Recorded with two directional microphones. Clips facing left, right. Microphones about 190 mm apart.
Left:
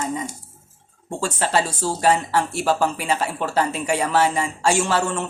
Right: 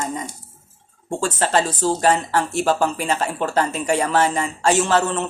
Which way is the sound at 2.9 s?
45° right (ahead or behind).